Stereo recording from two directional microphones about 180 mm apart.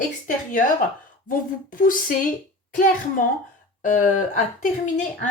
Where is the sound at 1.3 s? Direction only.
50° left (ahead or behind).